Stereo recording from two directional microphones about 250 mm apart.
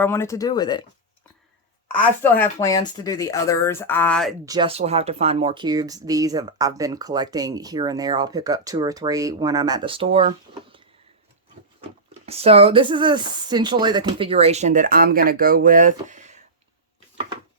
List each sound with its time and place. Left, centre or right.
0.0 s speech: centre
1.9 s speech: centre
4.4 s speech: centre
11.8 s speech: right